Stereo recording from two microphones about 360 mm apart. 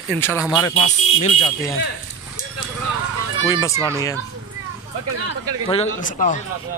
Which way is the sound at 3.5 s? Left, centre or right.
Centre.